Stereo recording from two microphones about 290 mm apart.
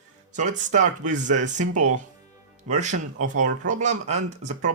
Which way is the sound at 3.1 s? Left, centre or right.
Right.